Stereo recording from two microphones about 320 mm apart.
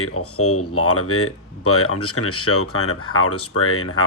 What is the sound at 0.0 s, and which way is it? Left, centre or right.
Speech, left.